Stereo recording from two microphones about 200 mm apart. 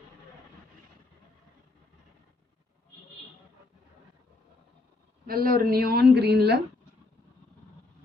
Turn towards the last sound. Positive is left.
turn(degrees=-55)  # may be behind; listen again after turning